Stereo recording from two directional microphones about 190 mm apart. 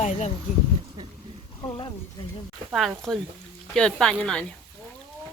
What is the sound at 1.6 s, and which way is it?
Speech, 25° left (ahead or behind).